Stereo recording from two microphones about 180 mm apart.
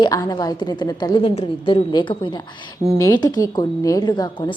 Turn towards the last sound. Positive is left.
turn(degrees=25)  # may be behind; listen again after turning